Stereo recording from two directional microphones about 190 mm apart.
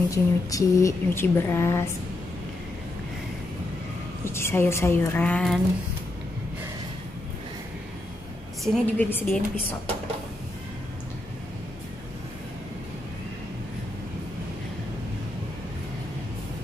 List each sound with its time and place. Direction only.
0.1 s speech: 15° left (ahead or behind)
4.2 s speech: 15° left (ahead or behind)
8.7 s speech: 10° left (ahead or behind)